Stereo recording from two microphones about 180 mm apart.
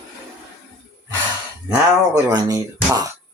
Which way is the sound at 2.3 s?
20° right (ahead or behind).